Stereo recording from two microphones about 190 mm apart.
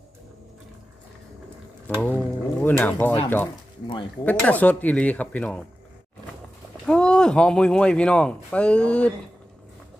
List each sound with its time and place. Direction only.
2.0 s speech: 10° left (ahead or behind)
6.8 s speech: 5° left (ahead or behind)